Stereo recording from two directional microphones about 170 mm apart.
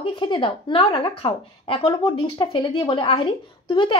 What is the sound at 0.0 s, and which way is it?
A woman's voice, 30° left (ahead or behind).